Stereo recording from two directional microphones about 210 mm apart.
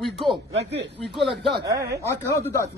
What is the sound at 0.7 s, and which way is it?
Speech, 55° right (ahead or behind).